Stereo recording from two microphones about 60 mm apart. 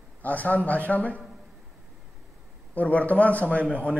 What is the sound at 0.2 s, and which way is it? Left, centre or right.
A man's voice, left.